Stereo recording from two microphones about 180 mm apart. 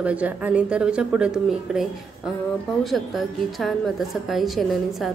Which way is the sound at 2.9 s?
Centre (ahead or behind).